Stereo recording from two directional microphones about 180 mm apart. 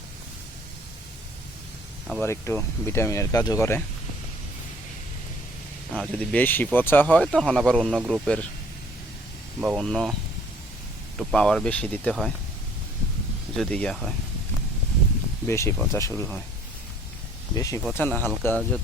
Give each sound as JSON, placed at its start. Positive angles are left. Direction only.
{"t": 2.2, "sound": "speech", "side_deg": 15}
{"t": 5.9, "sound": "speech", "side_deg": 5}
{"t": 9.6, "sound": "speech", "side_deg": 0}
{"t": 11.3, "sound": "speech", "side_deg": 5}
{"t": 13.6, "sound": "speech", "side_deg": 5}
{"t": 15.4, "sound": "speech", "side_deg": 15}
{"t": 17.5, "sound": "speech", "side_deg": 20}